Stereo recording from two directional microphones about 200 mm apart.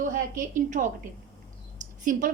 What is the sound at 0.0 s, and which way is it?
Speech, 40° right (ahead or behind).